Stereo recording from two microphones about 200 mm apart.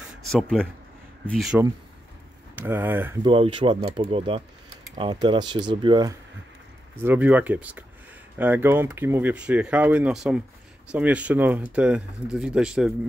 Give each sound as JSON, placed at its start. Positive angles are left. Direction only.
{"t": 0.2, "sound": "speech", "side_deg": 0}
{"t": 2.5, "sound": "speech", "side_deg": -10}
{"t": 3.3, "sound": "speech", "side_deg": -25}
{"t": 7.0, "sound": "speech", "side_deg": -10}